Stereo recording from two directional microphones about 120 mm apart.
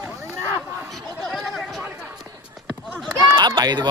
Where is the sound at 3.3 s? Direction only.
35° right (ahead or behind).